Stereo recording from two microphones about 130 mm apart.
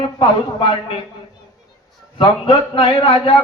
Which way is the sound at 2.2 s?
40° left (ahead or behind).